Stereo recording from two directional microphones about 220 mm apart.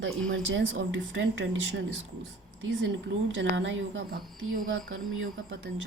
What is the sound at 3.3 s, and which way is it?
Speech, 60° right (ahead or behind).